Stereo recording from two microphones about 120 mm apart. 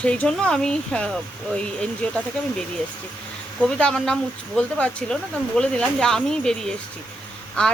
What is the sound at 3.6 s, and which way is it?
Speech, 10° left (ahead or behind).